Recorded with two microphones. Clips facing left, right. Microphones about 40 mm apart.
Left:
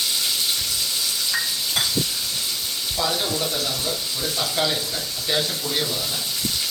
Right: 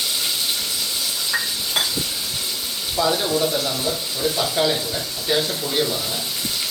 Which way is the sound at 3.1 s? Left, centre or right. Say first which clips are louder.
Right 7 dB; centre.